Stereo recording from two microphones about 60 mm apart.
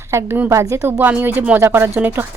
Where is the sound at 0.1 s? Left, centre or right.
Right.